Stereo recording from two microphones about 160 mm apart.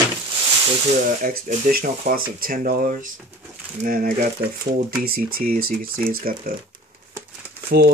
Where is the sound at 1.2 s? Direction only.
65° right (ahead or behind).